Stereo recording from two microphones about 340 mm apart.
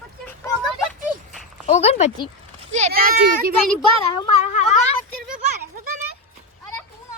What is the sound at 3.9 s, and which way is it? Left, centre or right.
Speech, right.